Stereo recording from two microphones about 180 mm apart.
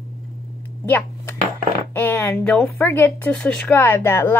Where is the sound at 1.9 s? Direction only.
10° left (ahead or behind).